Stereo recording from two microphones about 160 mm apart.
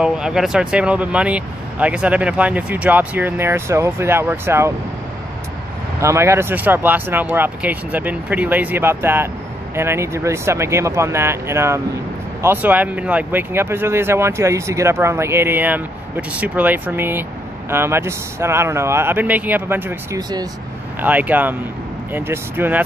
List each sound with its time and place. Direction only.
0.0 s speech: 5° right (ahead or behind)
5.9 s speech: 15° right (ahead or behind)
21.0 s speech: 10° right (ahead or behind)